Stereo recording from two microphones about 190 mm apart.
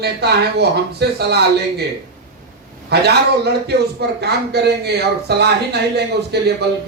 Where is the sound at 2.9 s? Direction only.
60° right (ahead or behind).